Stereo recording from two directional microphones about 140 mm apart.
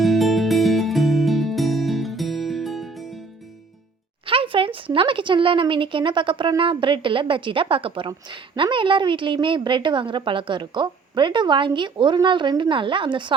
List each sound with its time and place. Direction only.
0.0 s music: centre (ahead or behind)
4.3 s speech: 40° right (ahead or behind)